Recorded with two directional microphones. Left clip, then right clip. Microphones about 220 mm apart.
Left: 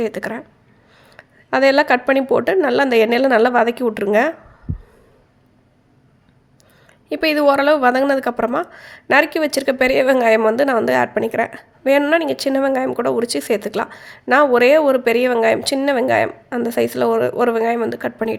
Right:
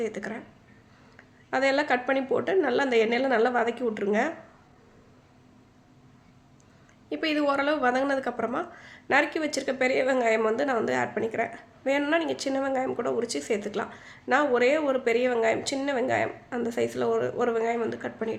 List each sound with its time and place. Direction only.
0.0 s a woman's voice: 40° left (ahead or behind)
7.1 s a woman's voice: 40° left (ahead or behind)